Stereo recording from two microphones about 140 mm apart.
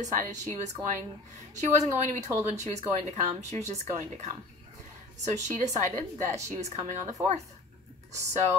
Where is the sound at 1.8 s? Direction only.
20° right (ahead or behind).